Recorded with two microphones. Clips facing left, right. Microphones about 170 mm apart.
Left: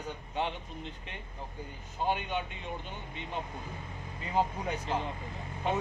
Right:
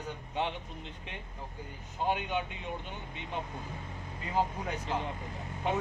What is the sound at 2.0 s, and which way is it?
Speech, 15° right (ahead or behind).